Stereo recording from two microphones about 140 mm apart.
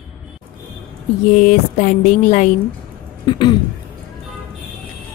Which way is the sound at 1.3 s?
65° left (ahead or behind).